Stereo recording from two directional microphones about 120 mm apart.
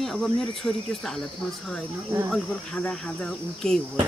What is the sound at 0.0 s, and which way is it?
Speech, centre (ahead or behind).